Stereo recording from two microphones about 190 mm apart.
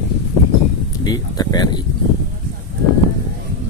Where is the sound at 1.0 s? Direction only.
20° left (ahead or behind).